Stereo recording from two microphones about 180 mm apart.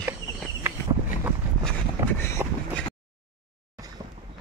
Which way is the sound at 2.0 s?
15° right (ahead or behind).